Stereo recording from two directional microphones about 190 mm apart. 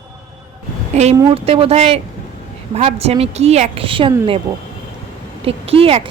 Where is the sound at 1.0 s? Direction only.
35° right (ahead or behind).